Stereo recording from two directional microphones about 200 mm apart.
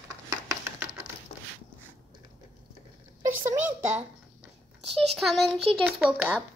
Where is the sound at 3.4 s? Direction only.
15° right (ahead or behind).